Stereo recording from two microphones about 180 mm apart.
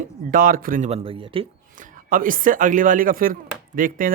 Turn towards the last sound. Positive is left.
turn(degrees=-50)  # may be behind; listen again after turning